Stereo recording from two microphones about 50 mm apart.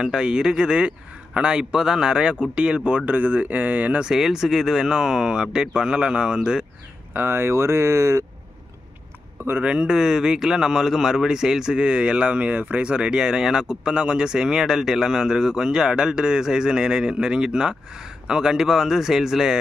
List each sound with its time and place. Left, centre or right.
0.0 s speech: centre; by 4.0 s right
4.0 s speech: centre
7.2 s speech: right
7.5 s speech: right
9.6 s speech: right